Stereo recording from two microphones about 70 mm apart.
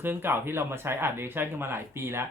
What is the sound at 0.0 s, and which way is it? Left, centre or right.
Speech, right.